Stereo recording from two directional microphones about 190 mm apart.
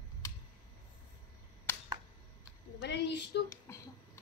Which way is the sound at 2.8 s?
65° left (ahead or behind).